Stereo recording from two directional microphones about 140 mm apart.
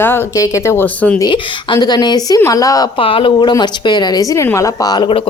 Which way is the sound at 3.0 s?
40° left (ahead or behind).